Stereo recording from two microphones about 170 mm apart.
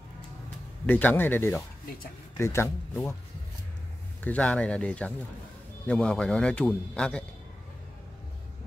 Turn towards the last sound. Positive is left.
turn(degrees=5)  # may be behind; listen again after turning